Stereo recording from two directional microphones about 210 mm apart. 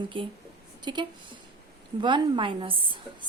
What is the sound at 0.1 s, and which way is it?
A woman's voice, 25° right (ahead or behind).